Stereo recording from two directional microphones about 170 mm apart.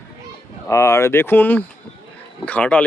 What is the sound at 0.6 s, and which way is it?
Speech, 15° left (ahead or behind).